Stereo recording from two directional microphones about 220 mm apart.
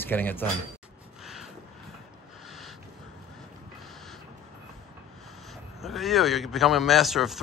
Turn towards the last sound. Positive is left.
turn(degrees=0)  # may be behind; listen again after turning